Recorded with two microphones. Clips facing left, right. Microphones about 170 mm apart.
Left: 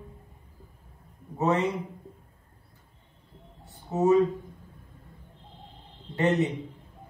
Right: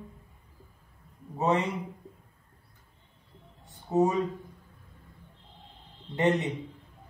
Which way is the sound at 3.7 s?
15° right (ahead or behind).